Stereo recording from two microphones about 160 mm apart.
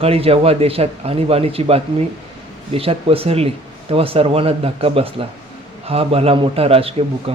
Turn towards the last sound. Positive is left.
turn(degrees=-35)  # may be behind; listen again after turning